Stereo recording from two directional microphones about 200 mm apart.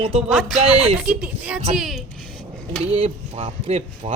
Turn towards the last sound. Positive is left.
turn(degrees=-30)  # may be behind; listen again after turning